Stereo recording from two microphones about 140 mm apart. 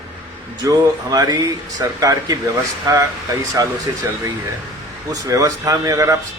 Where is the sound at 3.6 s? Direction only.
25° right (ahead or behind).